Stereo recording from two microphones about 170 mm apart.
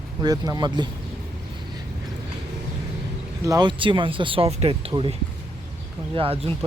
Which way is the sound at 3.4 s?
25° right (ahead or behind).